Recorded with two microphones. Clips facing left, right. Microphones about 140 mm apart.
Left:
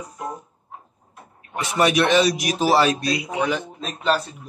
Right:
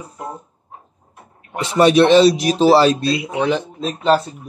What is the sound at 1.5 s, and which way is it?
A man's voice, 30° right (ahead or behind).